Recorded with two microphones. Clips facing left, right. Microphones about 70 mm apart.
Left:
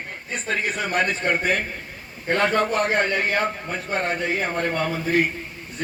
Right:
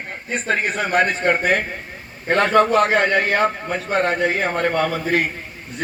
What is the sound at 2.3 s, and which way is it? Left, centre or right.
A man's voice, right.